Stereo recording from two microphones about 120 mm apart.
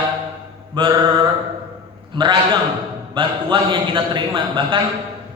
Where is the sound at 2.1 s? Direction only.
40° right (ahead or behind).